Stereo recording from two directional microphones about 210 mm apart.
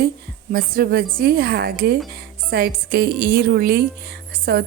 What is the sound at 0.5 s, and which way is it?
Speech, 45° right (ahead or behind).